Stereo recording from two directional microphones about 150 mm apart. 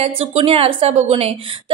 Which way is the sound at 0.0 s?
40° right (ahead or behind).